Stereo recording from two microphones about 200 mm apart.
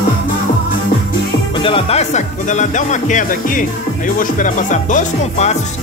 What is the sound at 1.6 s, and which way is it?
Speech, 25° left (ahead or behind).